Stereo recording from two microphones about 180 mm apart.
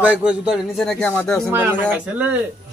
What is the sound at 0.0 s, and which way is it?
Speech, 5° right (ahead or behind).